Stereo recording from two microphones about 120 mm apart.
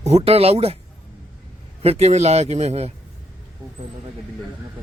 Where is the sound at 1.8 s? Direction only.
60° right (ahead or behind).